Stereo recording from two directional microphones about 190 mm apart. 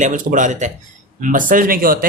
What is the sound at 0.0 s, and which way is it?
Speech, 40° right (ahead or behind).